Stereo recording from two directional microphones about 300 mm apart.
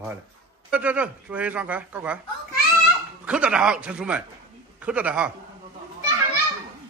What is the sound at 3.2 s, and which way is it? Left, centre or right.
Speech, centre.